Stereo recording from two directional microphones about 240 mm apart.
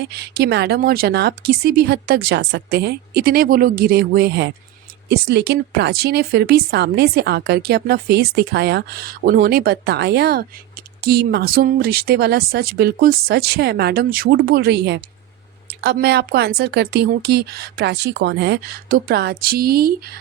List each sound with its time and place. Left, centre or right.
0.0 s speech: right